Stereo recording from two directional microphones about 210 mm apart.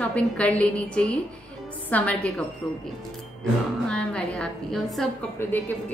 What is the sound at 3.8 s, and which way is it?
A woman's voice, 5° left (ahead or behind).